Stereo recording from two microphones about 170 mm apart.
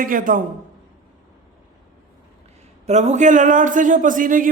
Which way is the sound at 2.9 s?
40° right (ahead or behind).